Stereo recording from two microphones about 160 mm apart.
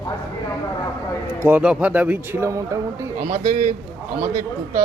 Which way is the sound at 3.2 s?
50° right (ahead or behind).